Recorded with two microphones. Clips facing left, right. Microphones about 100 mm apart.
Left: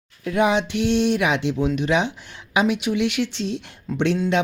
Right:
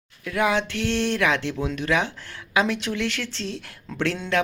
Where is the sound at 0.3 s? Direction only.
25° left (ahead or behind).